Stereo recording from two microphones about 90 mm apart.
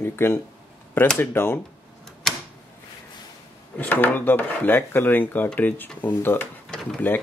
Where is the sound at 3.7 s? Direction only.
20° left (ahead or behind).